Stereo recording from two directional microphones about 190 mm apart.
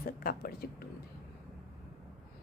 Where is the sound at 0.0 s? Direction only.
50° left (ahead or behind).